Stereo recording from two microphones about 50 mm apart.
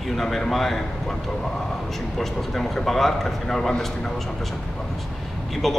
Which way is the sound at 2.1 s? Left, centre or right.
Centre.